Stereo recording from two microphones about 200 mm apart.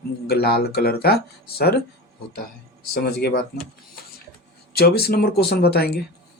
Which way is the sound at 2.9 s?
50° left (ahead or behind).